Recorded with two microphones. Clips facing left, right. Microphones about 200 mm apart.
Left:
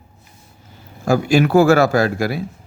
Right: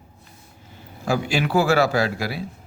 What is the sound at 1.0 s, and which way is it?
Speech, 45° left (ahead or behind).